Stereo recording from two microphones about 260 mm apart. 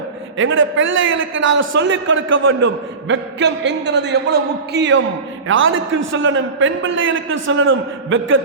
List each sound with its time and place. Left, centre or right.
0.3 s a man's voice: right